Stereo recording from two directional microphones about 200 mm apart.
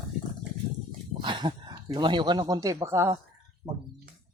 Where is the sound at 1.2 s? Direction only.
20° right (ahead or behind).